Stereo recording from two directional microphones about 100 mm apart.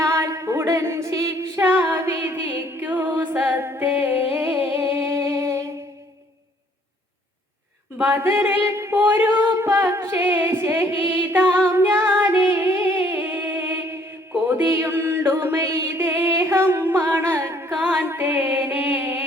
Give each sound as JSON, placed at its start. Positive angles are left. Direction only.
{"t": 0.0, "sound": "singing", "side_deg": -30}
{"t": 1.9, "sound": "music", "side_deg": -25}
{"t": 3.4, "sound": "singing", "side_deg": -20}
{"t": 7.9, "sound": "a capella", "side_deg": -20}
{"t": 8.6, "sound": "a sound", "side_deg": -25}
{"t": 9.0, "sound": "a capella", "side_deg": -20}
{"t": 11.7, "sound": "music", "side_deg": -20}